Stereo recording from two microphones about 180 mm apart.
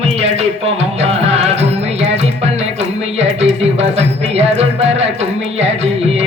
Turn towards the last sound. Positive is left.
turn(degrees=-35)  # may be behind; listen again after turning